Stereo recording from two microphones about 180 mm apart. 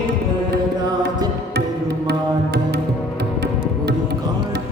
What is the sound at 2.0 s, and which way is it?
Music, 70° right (ahead or behind).